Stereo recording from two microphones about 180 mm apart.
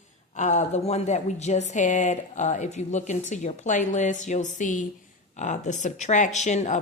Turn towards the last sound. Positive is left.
turn(degrees=40)  # may be behind; listen again after turning